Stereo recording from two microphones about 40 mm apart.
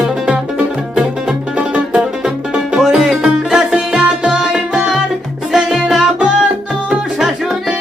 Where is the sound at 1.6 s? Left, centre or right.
Right.